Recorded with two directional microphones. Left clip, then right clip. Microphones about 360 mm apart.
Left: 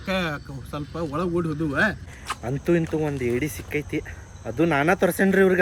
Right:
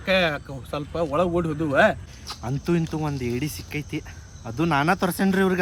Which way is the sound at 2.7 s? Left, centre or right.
Centre.